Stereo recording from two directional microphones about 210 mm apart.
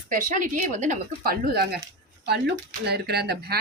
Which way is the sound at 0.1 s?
40° right (ahead or behind).